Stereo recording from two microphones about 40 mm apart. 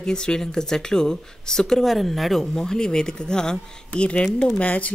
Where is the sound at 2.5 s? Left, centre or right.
Centre.